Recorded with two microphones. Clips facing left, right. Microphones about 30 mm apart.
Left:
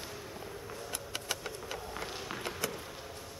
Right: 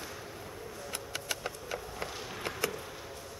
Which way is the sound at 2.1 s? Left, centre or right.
Centre.